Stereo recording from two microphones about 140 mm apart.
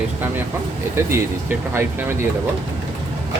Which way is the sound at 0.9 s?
15° right (ahead or behind).